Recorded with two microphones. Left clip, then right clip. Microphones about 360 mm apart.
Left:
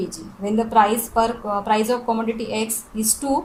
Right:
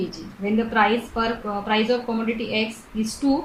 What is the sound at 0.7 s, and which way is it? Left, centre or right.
A woman's voice, left.